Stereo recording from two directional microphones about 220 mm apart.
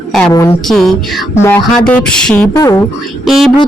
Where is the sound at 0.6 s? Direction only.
Centre (ahead or behind).